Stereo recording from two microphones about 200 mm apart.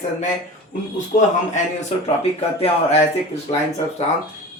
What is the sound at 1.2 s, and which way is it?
Speech, 35° left (ahead or behind).